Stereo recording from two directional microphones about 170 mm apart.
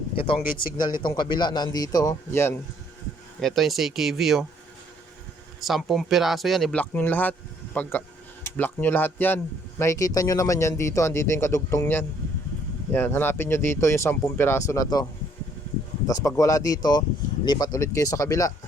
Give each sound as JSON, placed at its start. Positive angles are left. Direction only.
{"t": 0.2, "sound": "a man's voice", "side_deg": 30}
{"t": 3.4, "sound": "speech", "side_deg": 0}
{"t": 5.5, "sound": "speech", "side_deg": 0}
{"t": 16.0, "sound": "a man's voice", "side_deg": 20}